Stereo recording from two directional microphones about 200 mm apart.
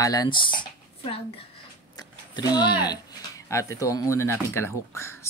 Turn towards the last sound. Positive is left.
turn(degrees=15)  # may be behind; listen again after turning